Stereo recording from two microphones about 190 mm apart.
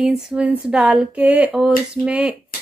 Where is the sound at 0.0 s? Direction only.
5° right (ahead or behind).